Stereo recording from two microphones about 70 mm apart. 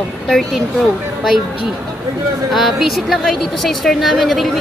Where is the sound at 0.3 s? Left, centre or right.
Centre.